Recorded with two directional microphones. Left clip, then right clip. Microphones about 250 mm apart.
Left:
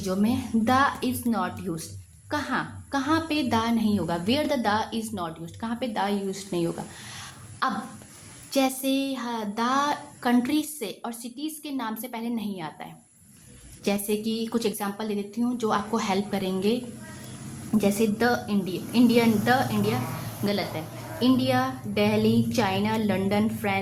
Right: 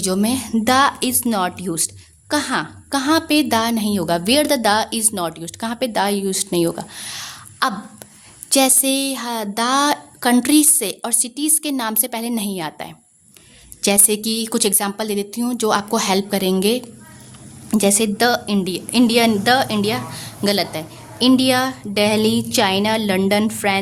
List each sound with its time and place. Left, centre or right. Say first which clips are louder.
0.0 s a woman's voice: right 7 dB; right